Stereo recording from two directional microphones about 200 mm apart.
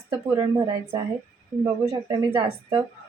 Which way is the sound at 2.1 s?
20° right (ahead or behind).